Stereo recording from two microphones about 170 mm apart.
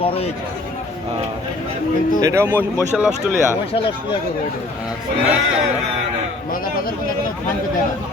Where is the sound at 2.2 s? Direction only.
15° right (ahead or behind).